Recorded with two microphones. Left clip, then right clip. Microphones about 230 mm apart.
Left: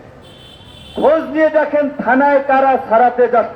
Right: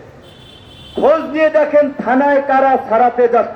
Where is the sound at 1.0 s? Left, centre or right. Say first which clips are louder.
Even; right.